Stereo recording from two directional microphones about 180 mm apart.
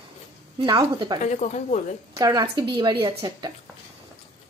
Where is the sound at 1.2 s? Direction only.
40° left (ahead or behind).